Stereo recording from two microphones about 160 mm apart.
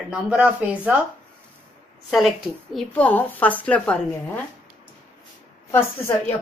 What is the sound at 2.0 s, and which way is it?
A woman's voice, centre (ahead or behind).